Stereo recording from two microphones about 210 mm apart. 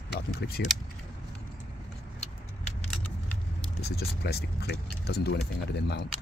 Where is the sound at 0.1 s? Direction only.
50° left (ahead or behind).